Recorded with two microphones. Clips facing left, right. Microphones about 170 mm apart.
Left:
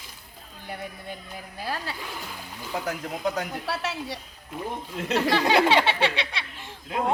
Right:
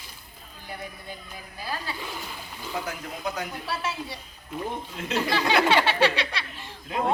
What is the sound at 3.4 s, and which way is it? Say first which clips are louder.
A woman's voice: left 1 dB; 75° left (ahead or behind).